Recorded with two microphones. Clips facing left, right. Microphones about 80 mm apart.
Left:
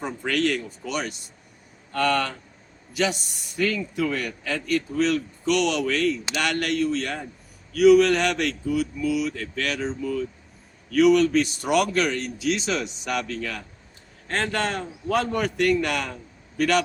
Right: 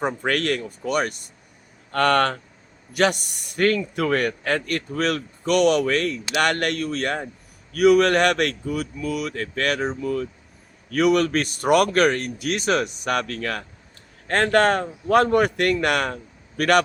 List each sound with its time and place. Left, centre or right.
0.0 s a man's voice: right